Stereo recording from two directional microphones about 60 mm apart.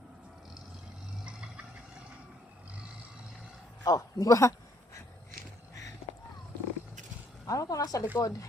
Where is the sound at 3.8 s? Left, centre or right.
Left.